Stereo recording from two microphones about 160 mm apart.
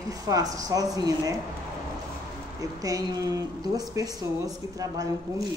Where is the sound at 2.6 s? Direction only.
20° right (ahead or behind).